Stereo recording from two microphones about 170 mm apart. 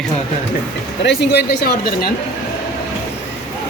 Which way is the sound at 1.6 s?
65° left (ahead or behind).